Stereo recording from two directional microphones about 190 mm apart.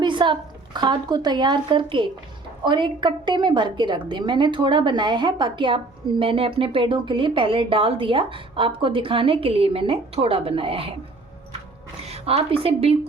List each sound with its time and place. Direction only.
0.0 s a woman's voice: 25° right (ahead or behind)
12.0 s a woman's voice: 35° right (ahead or behind)